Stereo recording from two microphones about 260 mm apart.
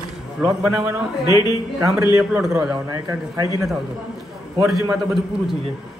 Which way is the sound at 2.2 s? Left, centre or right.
Centre.